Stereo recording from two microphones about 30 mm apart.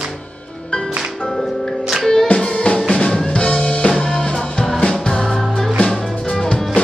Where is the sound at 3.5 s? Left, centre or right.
Left.